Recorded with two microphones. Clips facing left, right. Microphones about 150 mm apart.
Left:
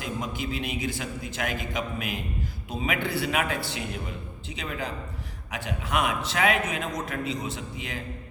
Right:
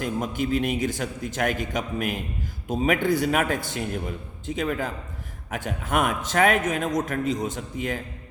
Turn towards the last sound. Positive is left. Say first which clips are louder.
# right 6 dB
turn(degrees=-45)  # may be behind; listen again after turning